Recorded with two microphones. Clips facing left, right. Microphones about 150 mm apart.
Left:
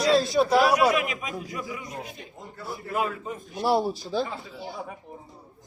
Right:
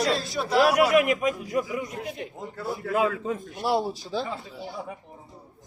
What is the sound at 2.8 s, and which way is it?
Speech, 90° right.